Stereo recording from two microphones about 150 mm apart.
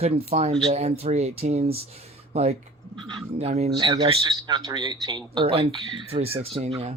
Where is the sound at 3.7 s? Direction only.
30° right (ahead or behind).